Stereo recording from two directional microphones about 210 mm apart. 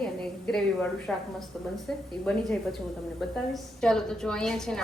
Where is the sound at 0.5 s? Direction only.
5° left (ahead or behind).